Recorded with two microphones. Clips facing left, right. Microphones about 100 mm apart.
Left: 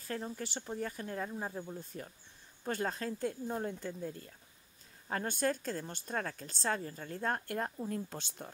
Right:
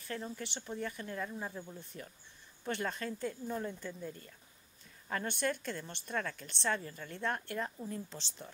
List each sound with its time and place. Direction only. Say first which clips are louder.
0.0 s a woman's voice: left 2 dB; 40° left (ahead or behind)
5.4 s a woman's voice: left 2 dB; 40° left (ahead or behind)